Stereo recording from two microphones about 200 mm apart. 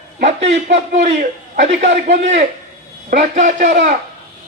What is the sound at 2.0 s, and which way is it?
A man's voice, 35° right (ahead or behind).